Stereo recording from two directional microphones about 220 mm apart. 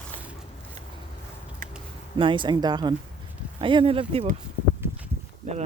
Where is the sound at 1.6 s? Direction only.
40° right (ahead or behind).